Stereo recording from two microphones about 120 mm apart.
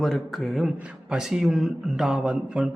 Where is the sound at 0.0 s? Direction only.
Centre (ahead or behind).